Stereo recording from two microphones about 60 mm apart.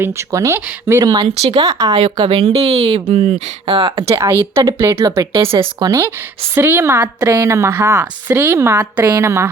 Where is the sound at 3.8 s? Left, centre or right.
Right.